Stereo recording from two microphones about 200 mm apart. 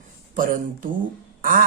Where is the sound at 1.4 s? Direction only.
45° right (ahead or behind).